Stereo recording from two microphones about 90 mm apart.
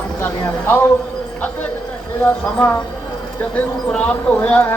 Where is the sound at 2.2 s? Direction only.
15° left (ahead or behind).